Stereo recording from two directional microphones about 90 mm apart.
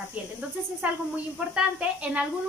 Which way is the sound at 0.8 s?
15° right (ahead or behind).